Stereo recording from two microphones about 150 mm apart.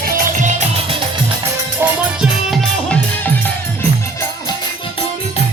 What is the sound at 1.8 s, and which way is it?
Music, 5° right (ahead or behind).